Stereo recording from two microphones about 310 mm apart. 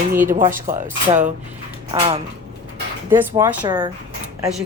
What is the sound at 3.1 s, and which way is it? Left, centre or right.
Speech, centre.